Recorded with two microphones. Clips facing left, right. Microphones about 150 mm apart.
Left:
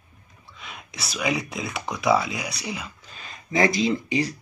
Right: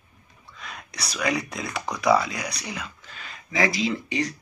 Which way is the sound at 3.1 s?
25° left (ahead or behind).